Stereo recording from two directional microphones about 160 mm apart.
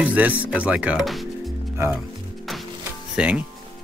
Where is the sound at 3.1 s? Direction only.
5° right (ahead or behind).